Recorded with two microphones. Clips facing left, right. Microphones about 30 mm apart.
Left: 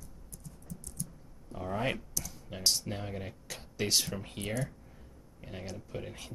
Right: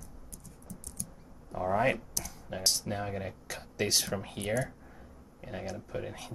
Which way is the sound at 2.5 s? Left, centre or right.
Centre.